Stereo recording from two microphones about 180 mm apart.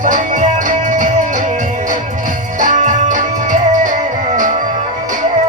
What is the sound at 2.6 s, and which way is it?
Music, 45° right (ahead or behind).